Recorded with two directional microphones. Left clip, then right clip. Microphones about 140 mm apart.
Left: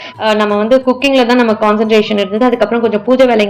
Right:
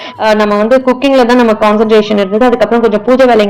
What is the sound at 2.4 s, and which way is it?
Speech, 25° right (ahead or behind).